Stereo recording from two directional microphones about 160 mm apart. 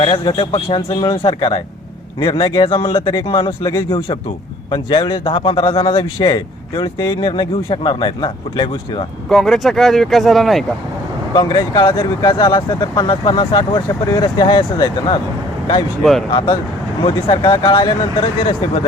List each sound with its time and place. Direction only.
0.0 s a man's voice: 35° left (ahead or behind)
3.6 s speech: 20° left (ahead or behind)
3.8 s a man's voice: 35° left (ahead or behind)
9.3 s speech: centre (ahead or behind)
11.3 s speech: 30° left (ahead or behind)
17.0 s a man's voice: 30° left (ahead or behind)